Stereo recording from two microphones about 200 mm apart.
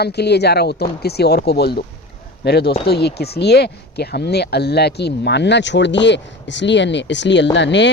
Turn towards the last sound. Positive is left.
turn(degrees=60)  # may be behind; listen again after turning